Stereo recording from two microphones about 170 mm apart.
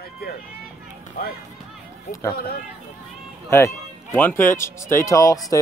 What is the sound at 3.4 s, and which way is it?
Speech, 15° left (ahead or behind).